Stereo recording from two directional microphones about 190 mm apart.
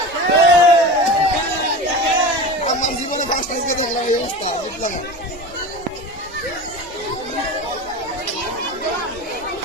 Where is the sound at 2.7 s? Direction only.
40° left (ahead or behind).